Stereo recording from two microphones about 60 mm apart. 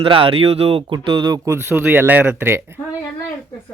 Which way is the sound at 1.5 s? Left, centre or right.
Right.